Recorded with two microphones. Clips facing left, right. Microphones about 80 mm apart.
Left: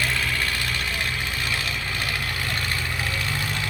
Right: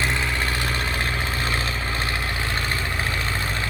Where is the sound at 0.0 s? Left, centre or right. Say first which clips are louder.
Right 1 dB; right.